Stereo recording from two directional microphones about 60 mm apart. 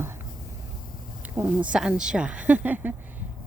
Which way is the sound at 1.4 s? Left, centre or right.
Right.